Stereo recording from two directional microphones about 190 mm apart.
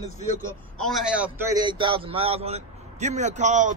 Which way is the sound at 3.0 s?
40° right (ahead or behind).